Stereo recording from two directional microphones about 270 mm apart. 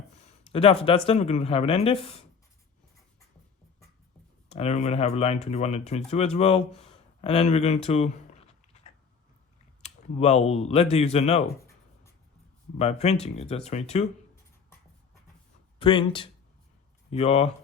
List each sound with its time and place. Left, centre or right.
0.5 s speech: left
4.4 s speech: left
12.7 s speech: left
15.8 s speech: centre